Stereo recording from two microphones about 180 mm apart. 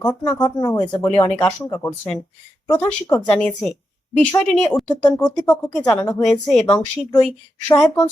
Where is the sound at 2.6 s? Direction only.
15° left (ahead or behind).